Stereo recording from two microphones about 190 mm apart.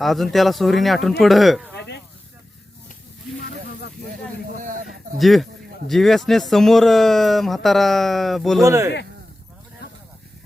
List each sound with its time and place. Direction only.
0.0 s speech: centre (ahead or behind)
3.4 s snake: 55° left (ahead or behind)
4.5 s a sound: 45° right (ahead or behind)
5.1 s speech: centre (ahead or behind)
8.6 s speech: 15° right (ahead or behind)